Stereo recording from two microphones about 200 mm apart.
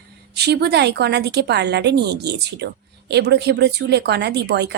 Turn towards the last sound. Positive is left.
turn(degrees=-55)  # may be behind; listen again after turning